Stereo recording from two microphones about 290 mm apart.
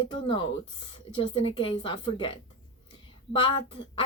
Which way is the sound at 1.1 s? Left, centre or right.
Centre.